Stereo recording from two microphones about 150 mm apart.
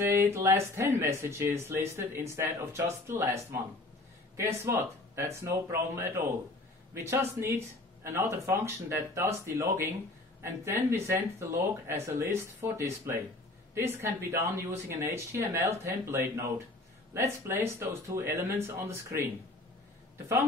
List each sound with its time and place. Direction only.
0.0 s speech: 15° right (ahead or behind)
4.4 s speech: 15° right (ahead or behind)